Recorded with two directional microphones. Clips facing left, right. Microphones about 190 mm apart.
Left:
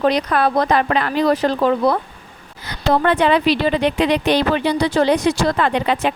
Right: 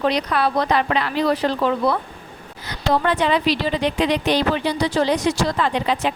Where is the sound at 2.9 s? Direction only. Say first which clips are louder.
Left 4 dB; 60° left (ahead or behind).